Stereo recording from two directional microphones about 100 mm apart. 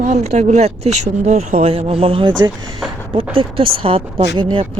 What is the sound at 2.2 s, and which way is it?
Speech, 45° right (ahead or behind).